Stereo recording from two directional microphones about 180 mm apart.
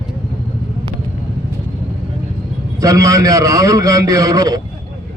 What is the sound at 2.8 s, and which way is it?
A man's voice, 20° right (ahead or behind).